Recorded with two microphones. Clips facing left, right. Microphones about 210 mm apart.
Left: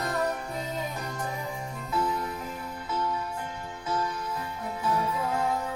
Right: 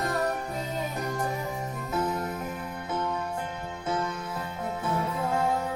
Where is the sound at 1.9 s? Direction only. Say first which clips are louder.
Even; 45° right (ahead or behind).